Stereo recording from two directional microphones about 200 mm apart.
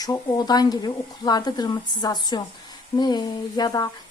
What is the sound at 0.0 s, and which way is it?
A woman's voice, 20° left (ahead or behind).